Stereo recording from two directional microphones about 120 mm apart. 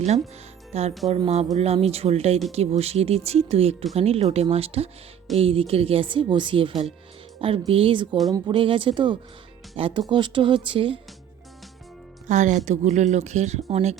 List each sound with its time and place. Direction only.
0.7 s a woman's voice: 65° right (ahead or behind); by 11.0 s 45° right (ahead or behind)
12.3 s speech: 90° right; by 13.9 s 65° right (ahead or behind)